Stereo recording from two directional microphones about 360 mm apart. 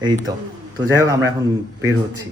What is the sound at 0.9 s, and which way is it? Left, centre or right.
Speech, centre.